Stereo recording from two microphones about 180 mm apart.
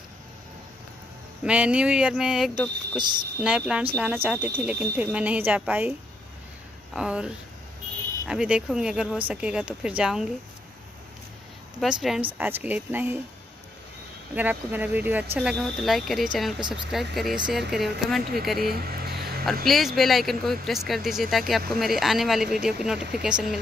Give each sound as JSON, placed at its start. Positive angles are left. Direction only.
{"t": 1.4, "sound": "speech", "side_deg": -5}
{"t": 11.8, "sound": "speech", "side_deg": 0}
{"t": 14.3, "sound": "speech", "side_deg": -10}
{"t": 18.7, "sound": "speech", "side_deg": -60}
{"t": 19.6, "sound": "speech", "side_deg": 0}